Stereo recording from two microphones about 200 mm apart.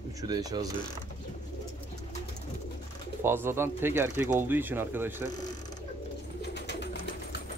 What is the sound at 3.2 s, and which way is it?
Speech, 10° right (ahead or behind).